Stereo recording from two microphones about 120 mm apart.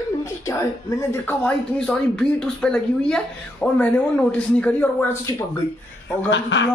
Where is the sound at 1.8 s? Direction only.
5° left (ahead or behind).